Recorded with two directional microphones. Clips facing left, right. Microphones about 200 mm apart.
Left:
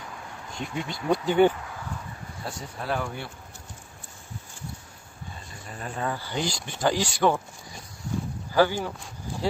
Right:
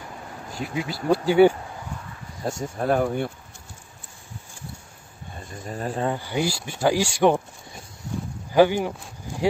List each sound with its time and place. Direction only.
0.5 s speech: 5° right (ahead or behind)
2.4 s speech: 45° right (ahead or behind)
5.7 s speech: 35° right (ahead or behind)
6.1 s speech: 10° right (ahead or behind)
8.5 s speech: 15° right (ahead or behind)